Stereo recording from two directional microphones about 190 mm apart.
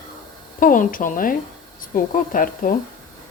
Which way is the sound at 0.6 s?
45° left (ahead or behind).